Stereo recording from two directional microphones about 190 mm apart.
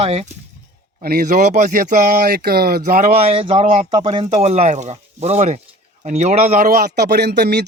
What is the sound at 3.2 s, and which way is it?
Speech, 30° right (ahead or behind).